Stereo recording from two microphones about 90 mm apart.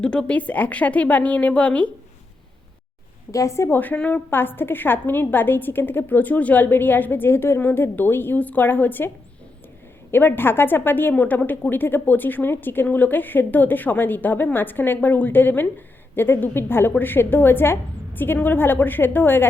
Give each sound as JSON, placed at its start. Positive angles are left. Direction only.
{"t": 0.0, "sound": "a woman's voice", "side_deg": 10}
{"t": 3.3, "sound": "a woman's voice", "side_deg": 35}
{"t": 10.1, "sound": "a woman's voice", "side_deg": 25}